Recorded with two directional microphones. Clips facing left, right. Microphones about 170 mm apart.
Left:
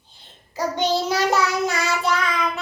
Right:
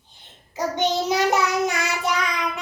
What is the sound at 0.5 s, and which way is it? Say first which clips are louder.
Child singing: left 1 dB; 20° right (ahead or behind).